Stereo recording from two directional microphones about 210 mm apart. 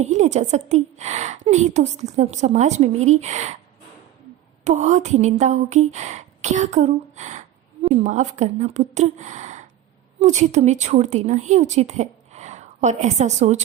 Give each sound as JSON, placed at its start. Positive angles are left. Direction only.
{"t": 0.0, "sound": "a woman's voice", "side_deg": -35}
{"t": 4.6, "sound": "a woman's voice", "side_deg": -35}